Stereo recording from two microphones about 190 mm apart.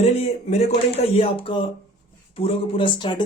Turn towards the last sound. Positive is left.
turn(degrees=25)  # may be behind; listen again after turning